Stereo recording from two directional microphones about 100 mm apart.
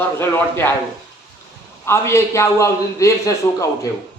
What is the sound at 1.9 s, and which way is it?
A man's voice, 30° left (ahead or behind).